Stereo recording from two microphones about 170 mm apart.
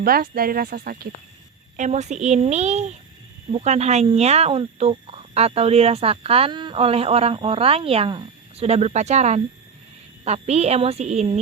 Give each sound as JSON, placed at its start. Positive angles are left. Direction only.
{"t": 0.0, "sound": "speech", "side_deg": -60}
{"t": 1.7, "sound": "a woman's voice", "side_deg": -45}